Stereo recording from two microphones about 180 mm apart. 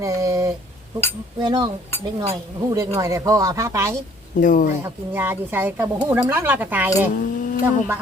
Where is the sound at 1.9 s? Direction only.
10° left (ahead or behind).